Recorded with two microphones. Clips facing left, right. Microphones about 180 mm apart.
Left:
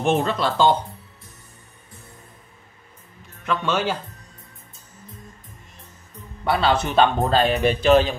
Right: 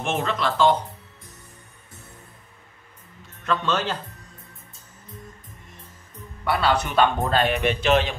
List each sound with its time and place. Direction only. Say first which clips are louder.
0.0 s a man's voice: left 4 dB; 35° left (ahead or behind)
3.4 s speech: left 1 dB; 10° left (ahead or behind)
6.4 s a man's voice: left 2 dB; 25° left (ahead or behind)